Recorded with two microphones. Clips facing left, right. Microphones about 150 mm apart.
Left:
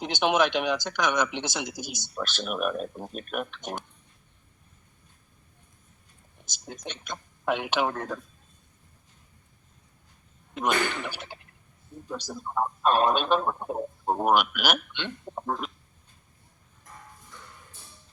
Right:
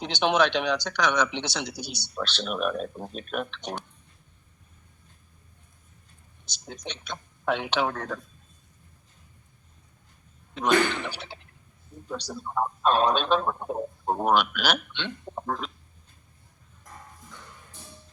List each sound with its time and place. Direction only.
0.0 s a man's voice: 10° left (ahead or behind)
1.7 s speech: 45° left (ahead or behind)
2.1 s a man's voice: 10° left (ahead or behind)
6.8 s a man's voice: 10° left (ahead or behind)
10.5 s a man's voice: 10° left (ahead or behind)